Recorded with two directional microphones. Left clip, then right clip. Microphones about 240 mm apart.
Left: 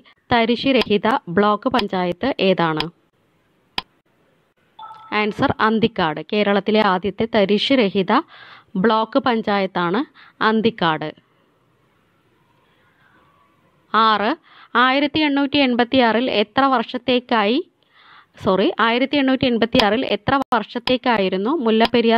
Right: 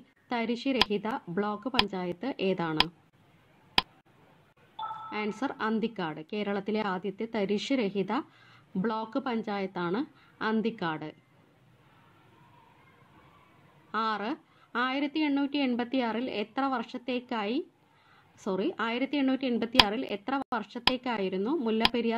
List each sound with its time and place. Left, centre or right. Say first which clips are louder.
0.3 s a woman's voice: left 14 dB; left
3.8 s a sound: even; centre
5.1 s a woman's voice: left 17 dB; left
13.9 s a woman's voice: left 15 dB; left